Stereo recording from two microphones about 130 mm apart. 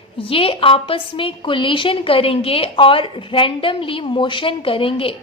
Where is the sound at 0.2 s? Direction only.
45° left (ahead or behind).